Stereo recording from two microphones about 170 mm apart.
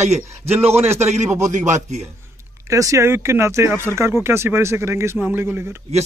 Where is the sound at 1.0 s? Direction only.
40° right (ahead or behind).